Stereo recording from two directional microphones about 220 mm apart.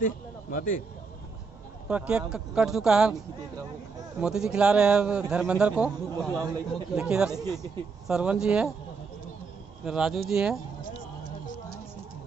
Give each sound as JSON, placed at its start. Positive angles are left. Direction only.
{"t": 0.0, "sound": "a man's voice", "side_deg": 40}
{"t": 1.9, "sound": "a man's voice", "side_deg": -5}
{"t": 4.2, "sound": "a man's voice", "side_deg": -5}
{"t": 6.3, "sound": "speech", "side_deg": -15}
{"t": 6.7, "sound": "a man's voice", "side_deg": -5}
{"t": 9.8, "sound": "a man's voice", "side_deg": 0}